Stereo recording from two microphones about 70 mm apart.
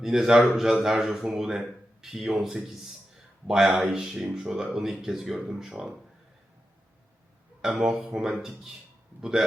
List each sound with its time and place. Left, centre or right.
0.0 s speech: centre
7.6 s speech: centre